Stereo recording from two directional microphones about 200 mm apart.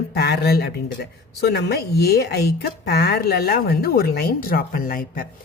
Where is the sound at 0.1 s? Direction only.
55° left (ahead or behind).